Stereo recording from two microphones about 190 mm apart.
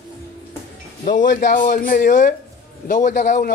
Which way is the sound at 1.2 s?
45° left (ahead or behind).